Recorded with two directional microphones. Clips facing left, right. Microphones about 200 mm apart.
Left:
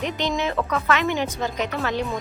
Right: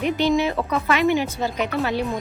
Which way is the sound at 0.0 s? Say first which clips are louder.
Right 5 dB; 10° right (ahead or behind).